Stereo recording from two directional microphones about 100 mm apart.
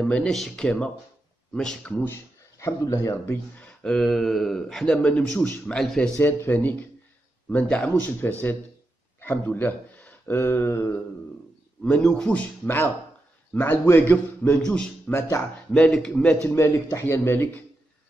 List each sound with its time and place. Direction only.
0.0 s a man's voice: 10° left (ahead or behind)
2.6 s speech: 30° left (ahead or behind)
3.5 s speech: 10° left (ahead or behind)
6.1 s a man's voice: 20° left (ahead or behind)
11.8 s a man's voice: 10° left (ahead or behind)
14.6 s a man's voice: 5° left (ahead or behind)
15.0 s speech: 25° left (ahead or behind)
15.7 s a man's voice: 10° left (ahead or behind)
16.4 s speech: 25° left (ahead or behind)